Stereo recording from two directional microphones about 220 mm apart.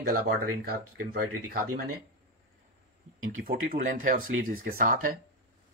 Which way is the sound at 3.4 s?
40° right (ahead or behind).